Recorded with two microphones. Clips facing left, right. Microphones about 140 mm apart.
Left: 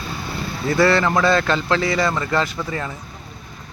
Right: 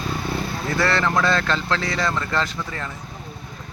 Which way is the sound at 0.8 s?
5° left (ahead or behind).